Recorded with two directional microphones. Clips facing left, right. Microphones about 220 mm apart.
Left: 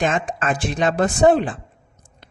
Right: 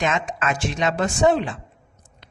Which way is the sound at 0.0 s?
30° left (ahead or behind).